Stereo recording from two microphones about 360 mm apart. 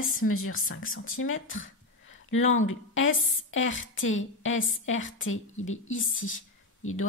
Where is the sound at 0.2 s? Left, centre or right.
Left.